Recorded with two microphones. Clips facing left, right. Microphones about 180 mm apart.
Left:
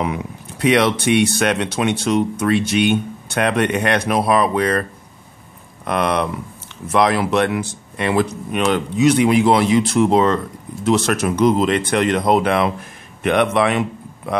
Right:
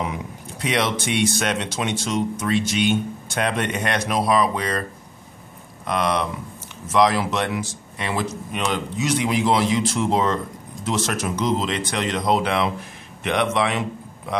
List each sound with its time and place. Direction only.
0.0 s speech: 65° left (ahead or behind)
5.9 s speech: 60° left (ahead or behind)